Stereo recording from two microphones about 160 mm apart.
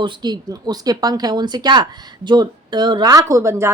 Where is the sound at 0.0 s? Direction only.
25° right (ahead or behind).